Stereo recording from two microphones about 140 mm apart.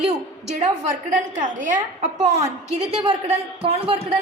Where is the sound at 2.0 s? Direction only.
50° right (ahead or behind).